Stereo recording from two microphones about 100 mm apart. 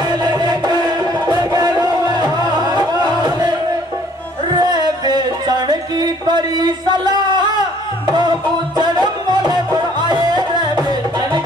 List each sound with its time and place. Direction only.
0.1 s music: 45° right (ahead or behind)
4.6 s music: 45° right (ahead or behind)